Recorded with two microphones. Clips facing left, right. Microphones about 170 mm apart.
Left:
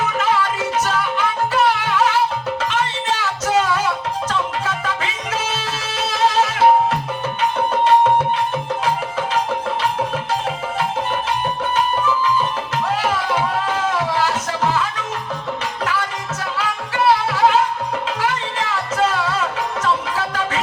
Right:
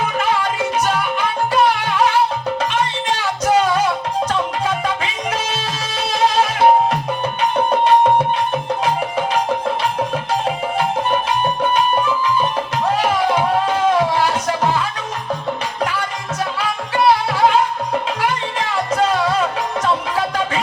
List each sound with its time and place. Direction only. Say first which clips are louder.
0.8 s music: even; 15° right (ahead or behind)
3.4 s music: right 3 dB; 15° right (ahead or behind)
13.0 s music: right 3 dB; 15° right (ahead or behind)
19.8 s music: right 2 dB; 15° right (ahead or behind)